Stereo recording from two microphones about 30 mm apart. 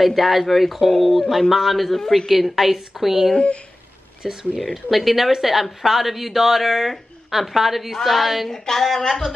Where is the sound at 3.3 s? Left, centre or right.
Left.